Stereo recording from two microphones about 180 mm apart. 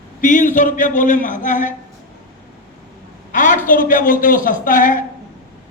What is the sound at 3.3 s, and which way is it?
A woman's voice, 45° left (ahead or behind).